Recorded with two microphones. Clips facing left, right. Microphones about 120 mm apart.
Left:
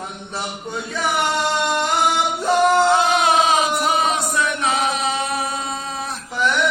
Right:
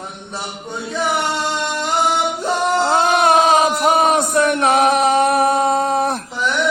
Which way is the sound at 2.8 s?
45° right (ahead or behind).